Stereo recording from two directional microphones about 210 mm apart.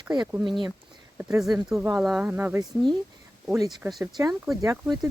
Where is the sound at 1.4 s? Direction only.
Centre (ahead or behind).